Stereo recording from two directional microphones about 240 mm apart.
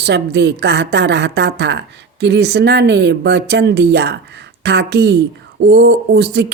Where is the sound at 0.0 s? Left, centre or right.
Right.